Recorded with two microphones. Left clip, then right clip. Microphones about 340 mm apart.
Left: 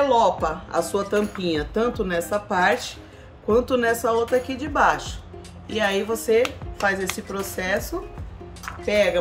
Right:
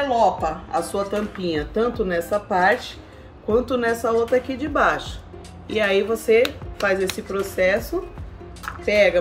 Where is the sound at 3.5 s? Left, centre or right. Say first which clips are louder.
Left 1 dB; left.